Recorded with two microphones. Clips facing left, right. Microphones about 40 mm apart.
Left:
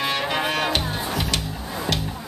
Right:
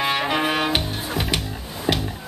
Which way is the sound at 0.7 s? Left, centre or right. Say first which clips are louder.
Even; right.